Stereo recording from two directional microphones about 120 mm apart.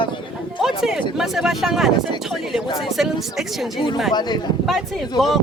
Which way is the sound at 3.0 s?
Centre (ahead or behind).